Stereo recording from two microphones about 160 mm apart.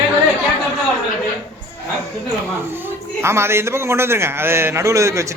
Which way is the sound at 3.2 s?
15° right (ahead or behind).